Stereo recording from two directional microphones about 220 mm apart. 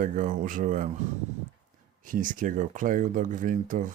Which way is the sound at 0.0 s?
35° right (ahead or behind).